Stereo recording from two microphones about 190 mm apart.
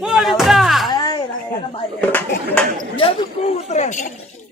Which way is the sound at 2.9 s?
30° left (ahead or behind).